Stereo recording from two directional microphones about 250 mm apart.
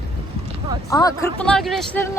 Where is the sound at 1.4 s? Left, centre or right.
Centre.